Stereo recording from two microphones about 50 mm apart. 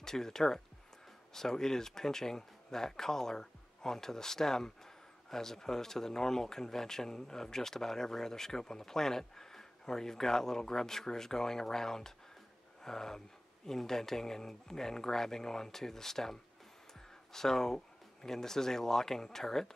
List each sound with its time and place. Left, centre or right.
0.0 s speech: centre